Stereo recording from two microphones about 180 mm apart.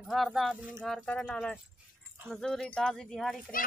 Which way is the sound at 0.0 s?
Centre (ahead or behind).